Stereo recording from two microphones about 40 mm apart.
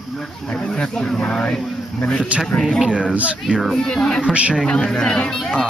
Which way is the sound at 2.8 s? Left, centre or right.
Right.